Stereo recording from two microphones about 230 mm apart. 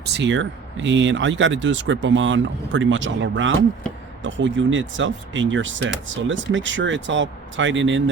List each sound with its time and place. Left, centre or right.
0.0 s speech: right